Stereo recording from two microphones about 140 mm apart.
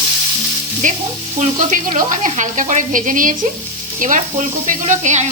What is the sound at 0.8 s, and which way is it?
Speech, 65° right (ahead or behind).